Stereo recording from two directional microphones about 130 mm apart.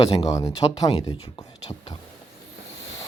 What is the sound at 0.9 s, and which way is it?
Speech, 50° left (ahead or behind).